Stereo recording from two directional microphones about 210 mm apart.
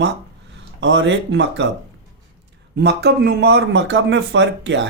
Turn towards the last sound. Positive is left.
turn(degrees=-60)  # may be behind; listen again after turning